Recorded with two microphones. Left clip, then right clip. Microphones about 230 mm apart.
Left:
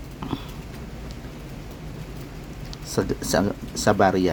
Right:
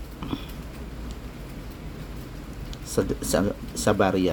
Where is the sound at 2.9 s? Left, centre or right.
Centre.